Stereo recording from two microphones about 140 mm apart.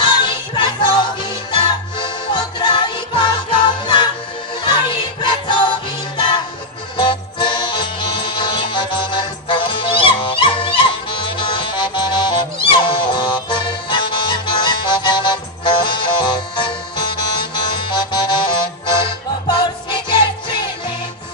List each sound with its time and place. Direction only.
0.0 s music: 35° left (ahead or behind)